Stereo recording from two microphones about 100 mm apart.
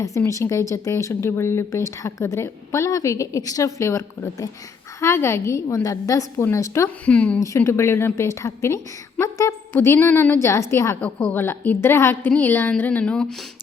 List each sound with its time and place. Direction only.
0.3 s a woman's voice: 30° left (ahead or behind)
7.0 s speech: 15° left (ahead or behind)
7.4 s a woman's voice: 30° left (ahead or behind); by 13.2 s 10° left (ahead or behind)